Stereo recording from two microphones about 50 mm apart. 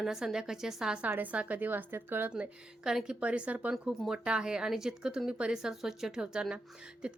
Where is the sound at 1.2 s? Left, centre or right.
Right.